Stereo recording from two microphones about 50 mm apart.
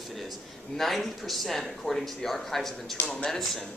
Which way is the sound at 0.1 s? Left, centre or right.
Centre.